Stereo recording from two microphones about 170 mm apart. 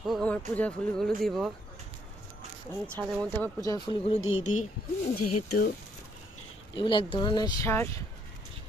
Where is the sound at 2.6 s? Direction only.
10° left (ahead or behind); by 4.7 s 35° left (ahead or behind).